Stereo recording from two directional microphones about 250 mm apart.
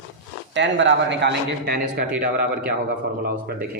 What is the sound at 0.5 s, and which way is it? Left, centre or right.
A man's voice, right.